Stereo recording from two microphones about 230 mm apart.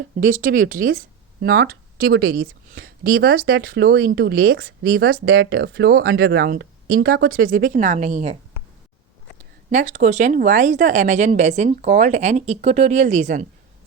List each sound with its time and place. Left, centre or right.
0.2 s speech: right
9.6 s speech: right